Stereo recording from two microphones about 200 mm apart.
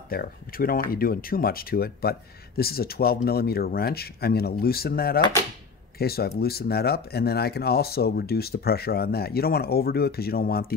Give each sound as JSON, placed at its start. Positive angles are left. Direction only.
{"t": 0.1, "sound": "speech", "side_deg": 45}